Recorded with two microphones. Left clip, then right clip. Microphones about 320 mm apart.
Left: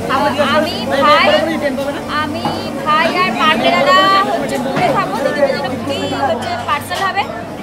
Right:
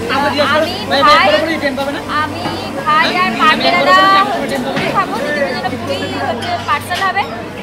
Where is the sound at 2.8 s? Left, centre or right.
Centre.